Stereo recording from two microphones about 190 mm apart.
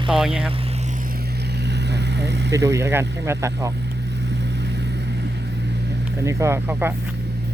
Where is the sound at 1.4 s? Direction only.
60° right (ahead or behind).